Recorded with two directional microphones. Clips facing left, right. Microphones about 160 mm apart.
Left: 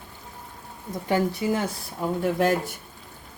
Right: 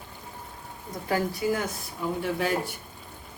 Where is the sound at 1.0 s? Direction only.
25° left (ahead or behind).